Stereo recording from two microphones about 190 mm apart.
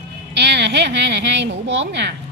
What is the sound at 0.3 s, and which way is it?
A woman's voice, 65° right (ahead or behind).